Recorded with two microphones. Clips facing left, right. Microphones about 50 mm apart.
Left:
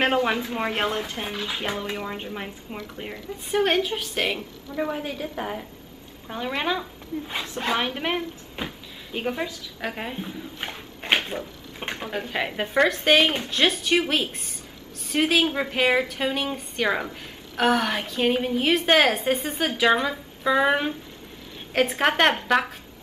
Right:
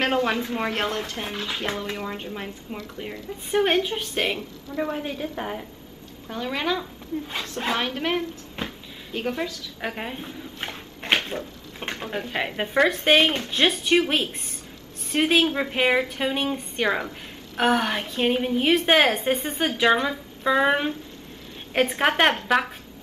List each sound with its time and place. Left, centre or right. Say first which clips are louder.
0.0 s speech: left 1 dB; centre
3.6 s a woman's voice: even; centre
6.2 s a woman's voice: even; centre